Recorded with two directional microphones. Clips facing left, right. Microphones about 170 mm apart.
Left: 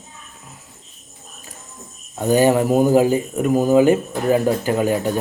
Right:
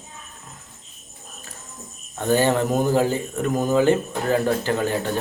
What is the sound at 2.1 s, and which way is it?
Speech, 15° left (ahead or behind).